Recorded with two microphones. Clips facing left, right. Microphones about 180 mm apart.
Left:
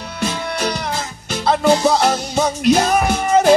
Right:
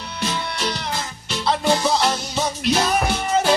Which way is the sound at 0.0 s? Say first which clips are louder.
Left 3 dB; 50° left (ahead or behind).